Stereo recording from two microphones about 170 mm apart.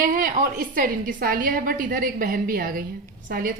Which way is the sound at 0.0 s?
55° right (ahead or behind).